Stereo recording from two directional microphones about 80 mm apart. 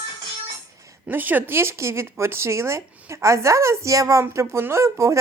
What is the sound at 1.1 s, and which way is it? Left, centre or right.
Speech, right.